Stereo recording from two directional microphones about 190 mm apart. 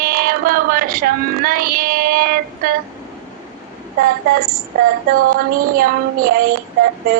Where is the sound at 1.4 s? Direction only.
50° right (ahead or behind).